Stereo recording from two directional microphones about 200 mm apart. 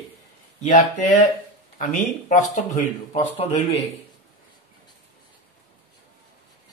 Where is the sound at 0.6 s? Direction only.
35° left (ahead or behind).